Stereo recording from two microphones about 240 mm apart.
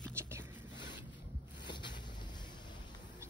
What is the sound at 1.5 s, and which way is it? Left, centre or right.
Vehicle, centre.